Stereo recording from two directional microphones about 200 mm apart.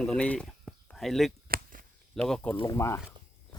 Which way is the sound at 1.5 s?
45° right (ahead or behind).